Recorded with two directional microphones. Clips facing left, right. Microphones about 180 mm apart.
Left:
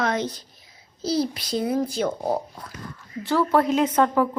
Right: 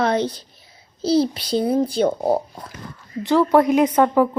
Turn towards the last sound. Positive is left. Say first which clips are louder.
# right 4 dB
turn(degrees=-10)  # may be behind; listen again after turning